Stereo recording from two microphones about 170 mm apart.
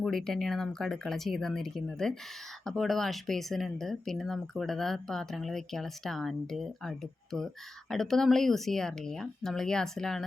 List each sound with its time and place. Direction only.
0.0 s speech: 5° left (ahead or behind)